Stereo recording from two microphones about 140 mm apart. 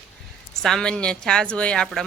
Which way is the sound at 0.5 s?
5° left (ahead or behind).